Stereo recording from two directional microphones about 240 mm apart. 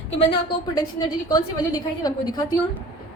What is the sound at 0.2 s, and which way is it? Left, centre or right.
A woman's voice, left.